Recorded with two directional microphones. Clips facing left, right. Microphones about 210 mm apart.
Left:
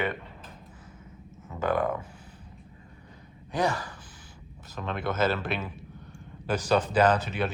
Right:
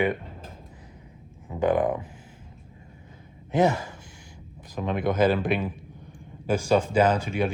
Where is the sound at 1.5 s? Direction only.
15° right (ahead or behind).